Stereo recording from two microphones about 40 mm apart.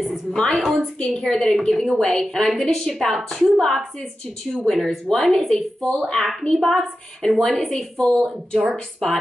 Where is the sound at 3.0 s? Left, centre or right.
Centre.